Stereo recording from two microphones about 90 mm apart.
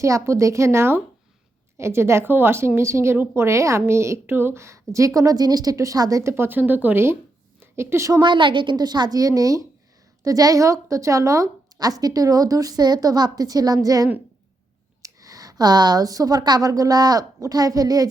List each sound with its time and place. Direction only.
0.0 s a woman's voice: 35° right (ahead or behind)
6.3 s a woman's voice: 25° right (ahead or behind)
8.2 s a woman's voice: 65° right (ahead or behind); by 18.1 s 45° right (ahead or behind)